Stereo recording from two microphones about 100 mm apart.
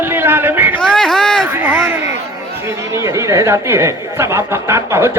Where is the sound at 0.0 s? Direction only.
20° right (ahead or behind).